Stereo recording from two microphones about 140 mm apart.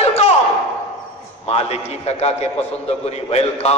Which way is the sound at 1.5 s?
45° left (ahead or behind).